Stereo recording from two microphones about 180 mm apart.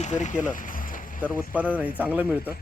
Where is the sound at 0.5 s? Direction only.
50° left (ahead or behind).